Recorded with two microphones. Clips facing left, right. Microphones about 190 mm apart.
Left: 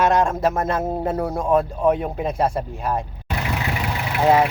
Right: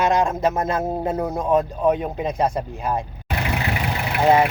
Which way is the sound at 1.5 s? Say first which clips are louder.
Left 1 dB; 5° left (ahead or behind).